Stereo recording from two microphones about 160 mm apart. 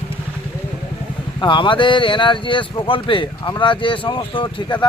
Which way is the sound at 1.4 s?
30° left (ahead or behind).